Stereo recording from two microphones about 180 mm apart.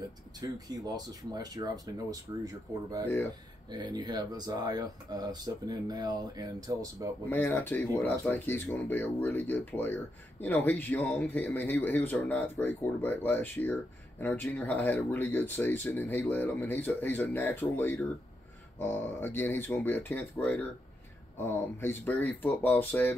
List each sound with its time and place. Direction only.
0.4 s speech: 20° right (ahead or behind)
7.2 s speech: 10° left (ahead or behind)